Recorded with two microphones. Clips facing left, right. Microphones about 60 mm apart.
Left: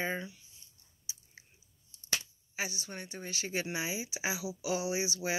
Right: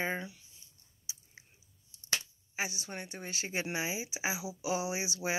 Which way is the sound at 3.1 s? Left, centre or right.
Right.